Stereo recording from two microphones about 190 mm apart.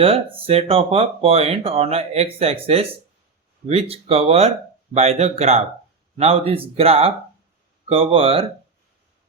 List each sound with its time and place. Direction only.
0.0 s speech: 30° right (ahead or behind)
3.7 s speech: 30° right (ahead or behind)